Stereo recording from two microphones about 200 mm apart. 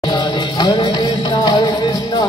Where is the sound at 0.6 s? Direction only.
20° left (ahead or behind).